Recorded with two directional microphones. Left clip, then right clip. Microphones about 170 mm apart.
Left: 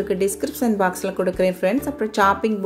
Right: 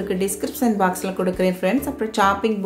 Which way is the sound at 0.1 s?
35° left (ahead or behind).